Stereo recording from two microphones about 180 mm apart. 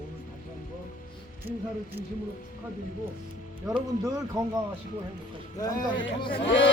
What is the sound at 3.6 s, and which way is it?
Speech, 20° right (ahead or behind).